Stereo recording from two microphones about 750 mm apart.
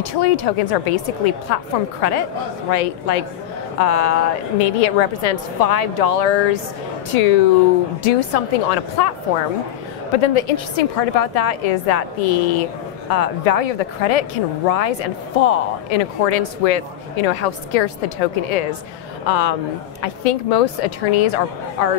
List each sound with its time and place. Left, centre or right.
0.0 s a woman's voice: left
10.1 s a woman's voice: left